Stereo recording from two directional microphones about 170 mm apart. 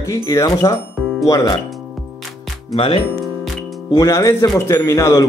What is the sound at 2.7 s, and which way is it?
Speech, 30° left (ahead or behind).